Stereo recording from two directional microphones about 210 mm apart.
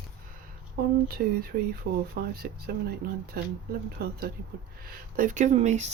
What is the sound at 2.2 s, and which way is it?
Speech, 45° right (ahead or behind).